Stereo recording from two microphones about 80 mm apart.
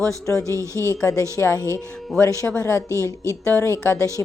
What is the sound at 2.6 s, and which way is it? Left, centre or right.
A woman's voice, left.